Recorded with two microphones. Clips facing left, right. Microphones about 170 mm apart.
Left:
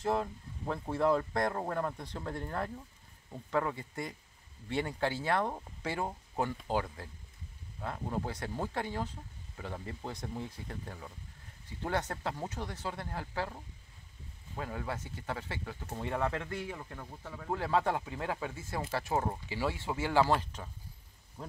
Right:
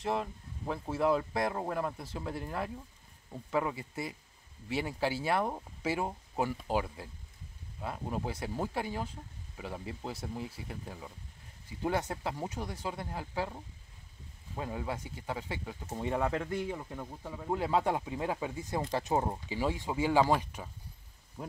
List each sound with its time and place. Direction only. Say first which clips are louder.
0.0 s speech: left 1 dB; centre (ahead or behind)